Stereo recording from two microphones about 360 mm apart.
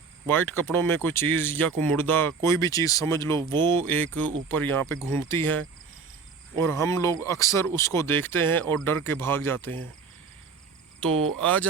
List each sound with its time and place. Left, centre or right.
0.3 s speech: centre
11.1 s cricket: right
11.3 s speech: centre